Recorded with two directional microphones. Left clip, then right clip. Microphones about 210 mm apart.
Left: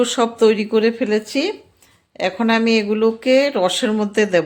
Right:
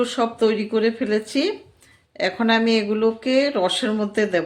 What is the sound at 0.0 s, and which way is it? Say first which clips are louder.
Speech: left 5 dB; 25° left (ahead or behind).